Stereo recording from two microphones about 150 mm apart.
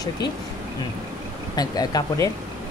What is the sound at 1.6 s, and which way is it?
Speech, 25° left (ahead or behind).